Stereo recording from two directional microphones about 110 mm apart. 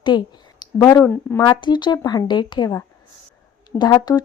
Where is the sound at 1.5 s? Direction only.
45° left (ahead or behind).